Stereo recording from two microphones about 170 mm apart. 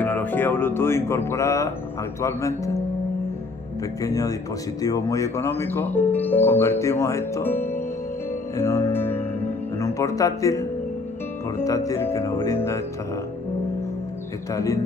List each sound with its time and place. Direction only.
0.0 s speech: 10° left (ahead or behind)
4.0 s speech: 20° left (ahead or behind)
14.5 s speech: 20° left (ahead or behind)